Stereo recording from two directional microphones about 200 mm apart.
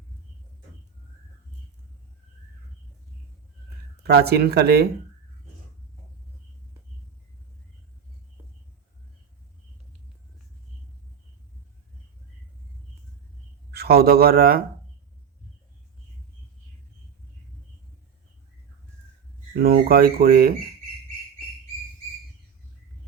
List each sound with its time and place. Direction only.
4.0 s speech: 50° right (ahead or behind)
13.7 s speech: 50° right (ahead or behind)
19.5 s speech: 50° right (ahead or behind)